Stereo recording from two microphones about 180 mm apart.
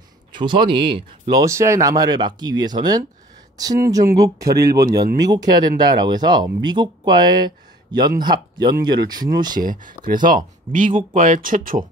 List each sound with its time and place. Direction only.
0.3 s speech: 25° right (ahead or behind)
1.4 s speech: 15° right (ahead or behind)
9.6 s speech: 50° right (ahead or behind)